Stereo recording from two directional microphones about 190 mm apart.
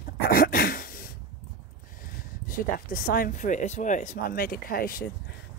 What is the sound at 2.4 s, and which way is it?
Speech, 45° left (ahead or behind).